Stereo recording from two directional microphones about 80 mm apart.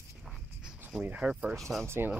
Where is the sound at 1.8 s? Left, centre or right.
Right.